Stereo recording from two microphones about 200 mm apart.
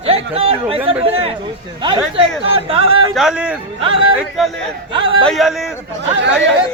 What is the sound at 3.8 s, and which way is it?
Speech, 25° right (ahead or behind).